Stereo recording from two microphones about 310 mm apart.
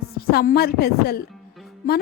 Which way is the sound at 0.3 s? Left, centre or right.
Left.